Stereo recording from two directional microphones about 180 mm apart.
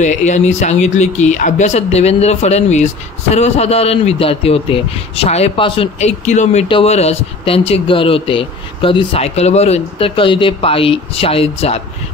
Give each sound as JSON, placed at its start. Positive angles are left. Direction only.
{"t": 0.0, "sound": "speech", "side_deg": 40}